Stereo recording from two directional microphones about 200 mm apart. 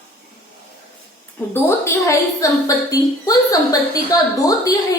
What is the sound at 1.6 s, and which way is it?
A woman's voice, 15° left (ahead or behind).